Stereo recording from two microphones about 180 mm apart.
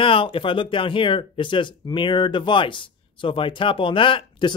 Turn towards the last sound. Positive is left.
turn(degrees=25)  # may be behind; listen again after turning